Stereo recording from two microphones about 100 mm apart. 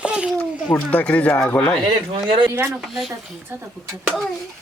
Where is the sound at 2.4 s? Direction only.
15° right (ahead or behind).